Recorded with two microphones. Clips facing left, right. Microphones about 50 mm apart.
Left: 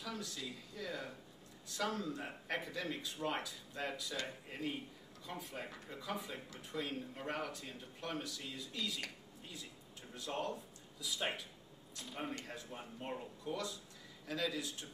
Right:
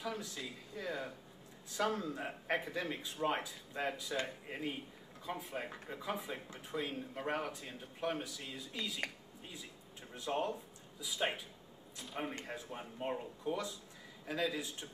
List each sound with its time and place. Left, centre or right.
0.0 s speech: right
10.1 s speech: centre